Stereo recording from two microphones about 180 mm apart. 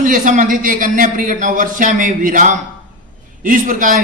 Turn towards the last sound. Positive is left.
turn(degrees=-45)  # may be behind; listen again after turning